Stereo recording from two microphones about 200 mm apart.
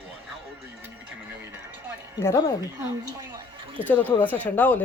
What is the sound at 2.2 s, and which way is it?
Speech, 15° left (ahead or behind).